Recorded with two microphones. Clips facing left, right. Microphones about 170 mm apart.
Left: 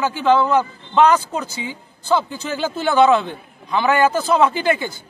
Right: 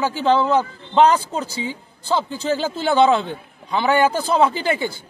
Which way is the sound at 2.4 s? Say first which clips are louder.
Right 3 dB; 30° right (ahead or behind).